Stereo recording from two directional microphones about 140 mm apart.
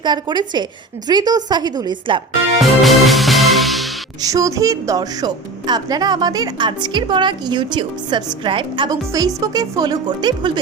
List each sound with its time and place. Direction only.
0.0 s a woman's voice: 30° right (ahead or behind)
2.6 s music: centre (ahead or behind)
4.2 s a woman's voice: 25° right (ahead or behind)